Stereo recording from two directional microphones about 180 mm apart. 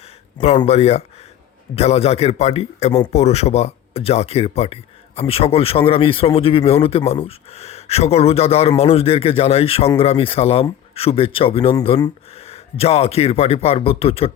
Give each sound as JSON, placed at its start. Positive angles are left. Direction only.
{"t": 0.7, "sound": "speech", "side_deg": 35}
{"t": 12.3, "sound": "speech", "side_deg": 35}